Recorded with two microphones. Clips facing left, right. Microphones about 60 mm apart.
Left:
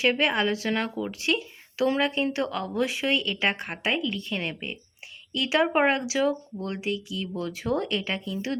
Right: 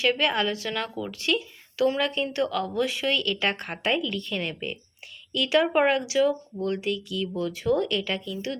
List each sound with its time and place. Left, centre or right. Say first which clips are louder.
0.0 s a woman's voice: even; left
7.3 s a woman's voice: right 3 dB; left
7.8 s speech: right 2 dB; centre